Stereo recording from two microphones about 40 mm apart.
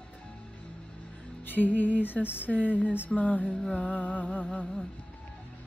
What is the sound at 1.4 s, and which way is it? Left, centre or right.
Music, left.